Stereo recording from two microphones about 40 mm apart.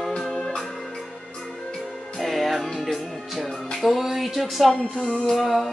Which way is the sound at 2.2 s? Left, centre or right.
Centre.